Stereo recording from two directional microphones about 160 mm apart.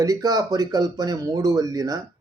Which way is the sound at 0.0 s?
25° right (ahead or behind).